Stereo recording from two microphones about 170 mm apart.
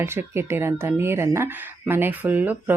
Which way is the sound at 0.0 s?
15° right (ahead or behind).